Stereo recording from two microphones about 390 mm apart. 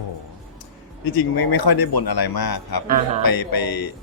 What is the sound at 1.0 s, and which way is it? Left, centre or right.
Speech, left.